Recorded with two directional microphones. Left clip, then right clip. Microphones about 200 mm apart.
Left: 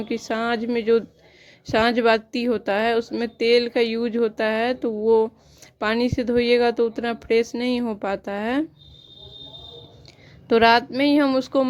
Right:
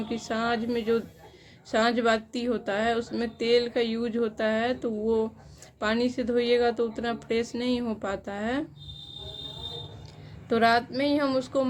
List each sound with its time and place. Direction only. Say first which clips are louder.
0.0 s a woman's voice: left 4 dB; 40° left (ahead or behind)
10.5 s a woman's voice: left 7 dB; 45° left (ahead or behind)